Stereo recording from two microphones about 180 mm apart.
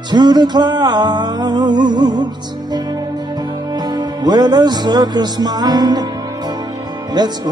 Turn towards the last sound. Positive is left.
turn(degrees=-20)  # may be behind; listen again after turning